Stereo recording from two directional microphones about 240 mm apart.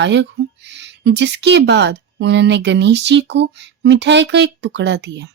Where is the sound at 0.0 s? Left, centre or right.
Right.